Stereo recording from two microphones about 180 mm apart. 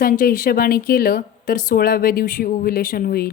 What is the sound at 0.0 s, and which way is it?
Speech, 50° left (ahead or behind).